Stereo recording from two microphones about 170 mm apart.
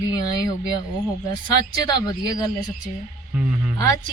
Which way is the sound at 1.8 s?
20° left (ahead or behind).